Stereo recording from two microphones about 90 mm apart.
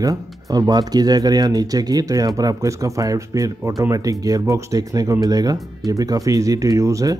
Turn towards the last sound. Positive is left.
turn(degrees=-35)  # may be behind; listen again after turning